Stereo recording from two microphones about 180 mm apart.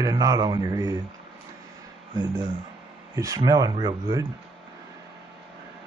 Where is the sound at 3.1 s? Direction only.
20° right (ahead or behind).